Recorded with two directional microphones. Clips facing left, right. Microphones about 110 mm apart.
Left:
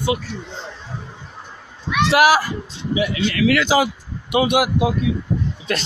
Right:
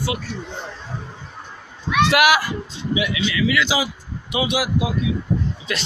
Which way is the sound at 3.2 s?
55° left (ahead or behind).